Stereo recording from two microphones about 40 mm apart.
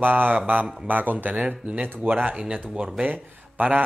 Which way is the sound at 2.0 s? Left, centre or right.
Right.